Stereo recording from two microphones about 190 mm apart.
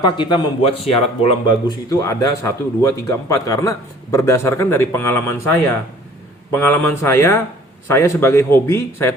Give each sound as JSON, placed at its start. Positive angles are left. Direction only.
{"t": 0.0, "sound": "speech", "side_deg": 25}